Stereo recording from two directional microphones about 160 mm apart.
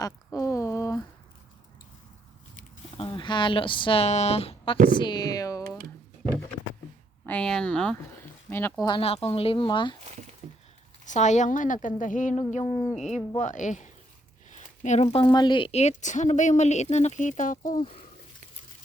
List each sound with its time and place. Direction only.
0.0 s a sound: 20° left (ahead or behind)
2.9 s speech: 35° left (ahead or behind)
7.3 s speech: 5° left (ahead or behind)
8.8 s speech: 35° left (ahead or behind)
10.0 s a sound: 45° right (ahead or behind)
11.0 s a woman's voice: 50° left (ahead or behind)
12.6 s speech: 25° left (ahead or behind)
13.3 s a woman's voice: 50° left (ahead or behind)